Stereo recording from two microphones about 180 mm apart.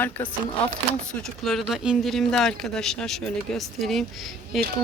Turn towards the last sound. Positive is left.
turn(degrees=0)  # may be behind; listen again after turning